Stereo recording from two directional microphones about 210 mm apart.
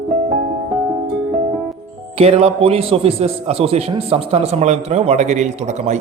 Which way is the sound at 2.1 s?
30° right (ahead or behind).